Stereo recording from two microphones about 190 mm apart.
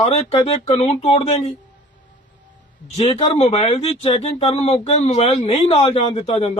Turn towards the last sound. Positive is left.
turn(degrees=35)  # may be behind; listen again after turning